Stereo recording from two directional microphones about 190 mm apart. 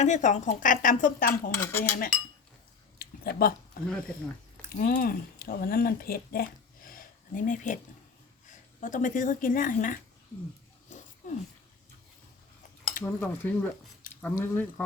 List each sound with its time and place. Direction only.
0.0 s speech: 40° left (ahead or behind)
1.3 s speech: 15° left (ahead or behind)
1.8 s speech: 50° left (ahead or behind)
3.0 s a sound: 55° left (ahead or behind)
4.8 s speech: 50° left (ahead or behind)
10.8 s a sound: 40° left (ahead or behind)
13.0 s speech: 10° left (ahead or behind)